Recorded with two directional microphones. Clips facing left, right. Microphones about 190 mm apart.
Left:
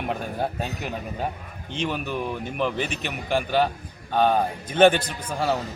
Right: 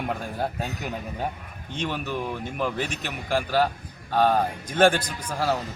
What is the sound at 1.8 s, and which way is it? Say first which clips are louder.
A man's voice: left 1 dB; centre (ahead or behind).